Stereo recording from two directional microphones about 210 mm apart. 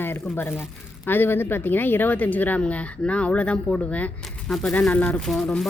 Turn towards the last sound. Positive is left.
turn(degrees=0)  # may be behind; listen again after turning